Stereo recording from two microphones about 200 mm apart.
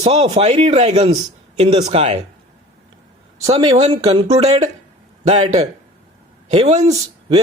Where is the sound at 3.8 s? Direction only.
35° right (ahead or behind).